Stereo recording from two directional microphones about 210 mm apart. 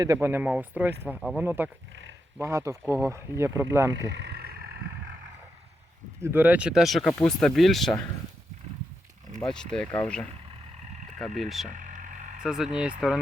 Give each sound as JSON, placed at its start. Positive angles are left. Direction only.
{"t": 0.0, "sound": "speech", "side_deg": -15}
{"t": 4.1, "sound": "vehicle", "side_deg": -50}
{"t": 6.2, "sound": "speech", "side_deg": -10}
{"t": 9.5, "sound": "speech", "side_deg": 5}